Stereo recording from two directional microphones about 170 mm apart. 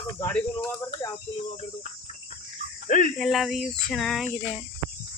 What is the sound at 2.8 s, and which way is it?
Speech, 50° left (ahead or behind).